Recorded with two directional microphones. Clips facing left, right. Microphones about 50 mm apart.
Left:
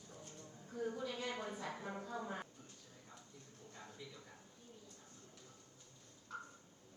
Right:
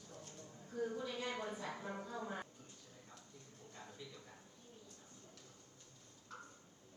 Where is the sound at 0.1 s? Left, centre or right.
Centre.